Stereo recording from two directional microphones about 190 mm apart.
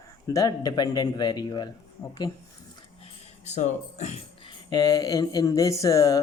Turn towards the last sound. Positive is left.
turn(degrees=20)  # may be behind; listen again after turning